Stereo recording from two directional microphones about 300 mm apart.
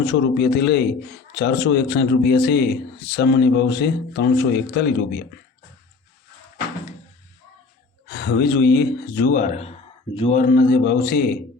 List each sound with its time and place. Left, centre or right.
0.0 s a man's voice: left
8.0 s a man's voice: left